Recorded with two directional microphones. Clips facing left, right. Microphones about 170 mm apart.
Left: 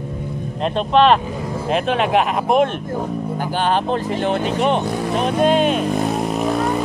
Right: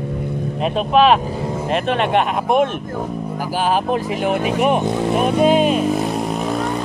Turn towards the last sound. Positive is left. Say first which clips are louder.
# left 1 dB
turn(degrees=0)  # may be behind; listen again after turning